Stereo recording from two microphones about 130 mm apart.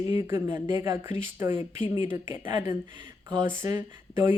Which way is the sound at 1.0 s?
20° right (ahead or behind).